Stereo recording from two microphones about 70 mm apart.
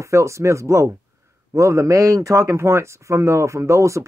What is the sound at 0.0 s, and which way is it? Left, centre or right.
Speech, right.